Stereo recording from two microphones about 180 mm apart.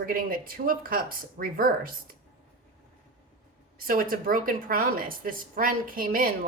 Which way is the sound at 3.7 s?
50° right (ahead or behind).